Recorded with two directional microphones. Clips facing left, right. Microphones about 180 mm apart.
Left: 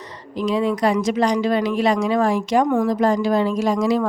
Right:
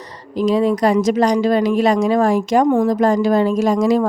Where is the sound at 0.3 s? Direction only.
40° right (ahead or behind).